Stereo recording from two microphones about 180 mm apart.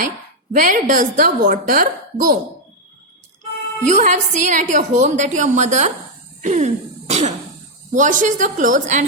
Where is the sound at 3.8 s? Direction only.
40° right (ahead or behind).